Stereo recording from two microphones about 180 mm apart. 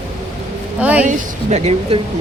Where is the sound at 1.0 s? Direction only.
35° right (ahead or behind).